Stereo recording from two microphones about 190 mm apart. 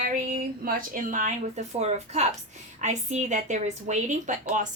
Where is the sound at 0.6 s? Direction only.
50° right (ahead or behind).